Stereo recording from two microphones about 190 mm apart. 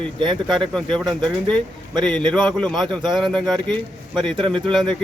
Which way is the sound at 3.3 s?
Centre (ahead or behind).